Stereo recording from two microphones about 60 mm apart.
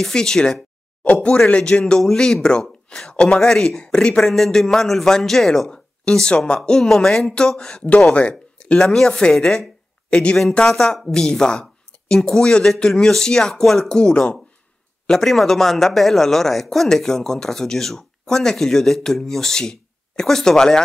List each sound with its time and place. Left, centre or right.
0.0 s speech: centre
1.0 s speech: left